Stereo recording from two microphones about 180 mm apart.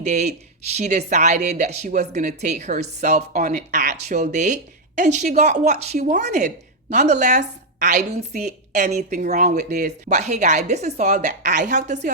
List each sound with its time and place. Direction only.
0.0 s a woman's voice: 40° right (ahead or behind)